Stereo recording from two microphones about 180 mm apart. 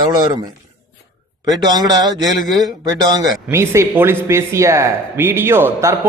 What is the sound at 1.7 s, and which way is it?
Speech, 20° right (ahead or behind).